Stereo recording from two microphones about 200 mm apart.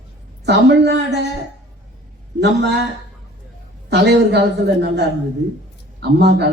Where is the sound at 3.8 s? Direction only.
55° right (ahead or behind).